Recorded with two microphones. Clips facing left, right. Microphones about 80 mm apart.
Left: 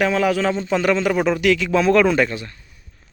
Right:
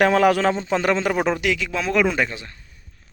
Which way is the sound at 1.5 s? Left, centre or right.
Centre.